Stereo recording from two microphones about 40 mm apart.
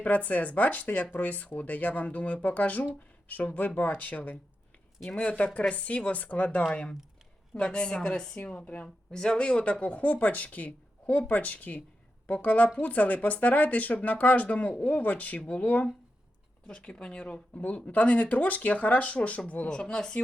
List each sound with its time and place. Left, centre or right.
0.0 s speech: left
6.6 s a woman's voice: left
9.1 s a woman's voice: left
19.6 s a woman's voice: left